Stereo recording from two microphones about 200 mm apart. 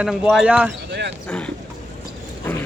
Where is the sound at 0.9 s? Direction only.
60° right (ahead or behind).